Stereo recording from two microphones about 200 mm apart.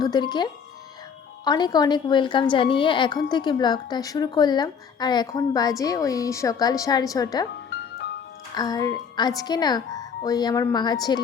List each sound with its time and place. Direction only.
0.0 s a woman's voice: 20° left (ahead or behind)
1.5 s a woman's voice: 20° left (ahead or behind)
8.5 s a woman's voice: 20° left (ahead or behind)